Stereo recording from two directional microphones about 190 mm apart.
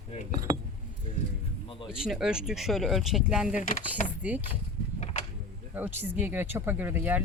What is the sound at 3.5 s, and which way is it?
Speech, 40° left (ahead or behind).